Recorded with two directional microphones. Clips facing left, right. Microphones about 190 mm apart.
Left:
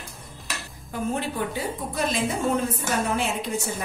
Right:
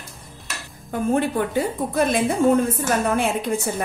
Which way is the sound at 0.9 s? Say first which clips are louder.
Right 7 dB; 55° right (ahead or behind).